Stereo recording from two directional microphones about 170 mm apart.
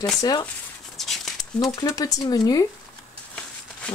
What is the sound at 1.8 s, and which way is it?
Speech, 20° left (ahead or behind).